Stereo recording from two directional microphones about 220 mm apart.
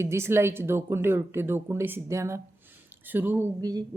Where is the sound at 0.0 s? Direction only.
10° right (ahead or behind).